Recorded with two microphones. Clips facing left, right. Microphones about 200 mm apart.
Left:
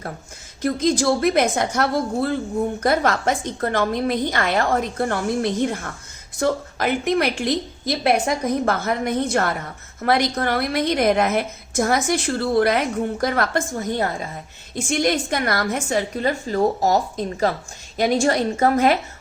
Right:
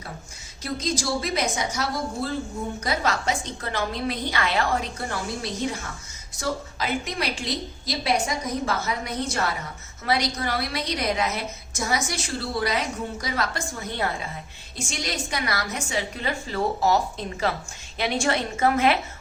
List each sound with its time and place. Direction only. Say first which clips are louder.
0.6 s a woman's voice: left 9 dB; 55° left (ahead or behind)
14.8 s a woman's voice: left 11 dB; 55° left (ahead or behind)